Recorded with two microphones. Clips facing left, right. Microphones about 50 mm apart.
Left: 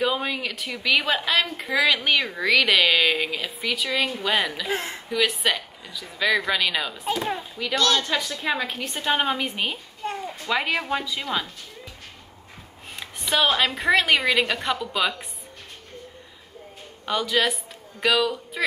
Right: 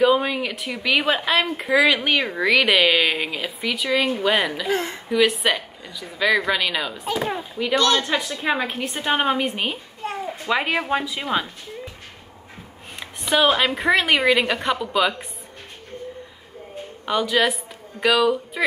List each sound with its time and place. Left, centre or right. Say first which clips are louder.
0.0 s a woman's voice: right 6 dB; centre
4.6 s a woman's voice: right 4 dB; centre
5.1 s a woman's voice: right 4 dB; centre
13.2 s a woman's voice: right 3 dB; centre
17.0 s a woman's voice: right 3 dB; centre